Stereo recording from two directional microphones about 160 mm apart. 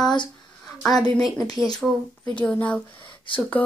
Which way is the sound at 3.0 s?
30° left (ahead or behind).